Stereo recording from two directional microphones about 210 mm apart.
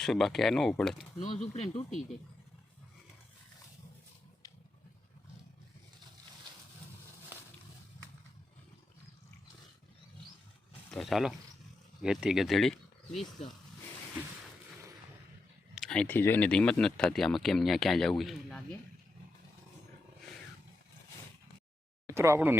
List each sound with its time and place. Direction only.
0.0 s speech: centre (ahead or behind)
1.2 s speech: 30° left (ahead or behind)
10.9 s speech: centre (ahead or behind)
13.4 s speech: 30° left (ahead or behind)
15.7 s speech: centre (ahead or behind)
22.0 s speech: 15° right (ahead or behind)